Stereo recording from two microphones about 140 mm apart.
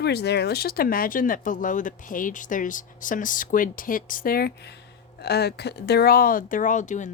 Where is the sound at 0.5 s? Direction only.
90° left.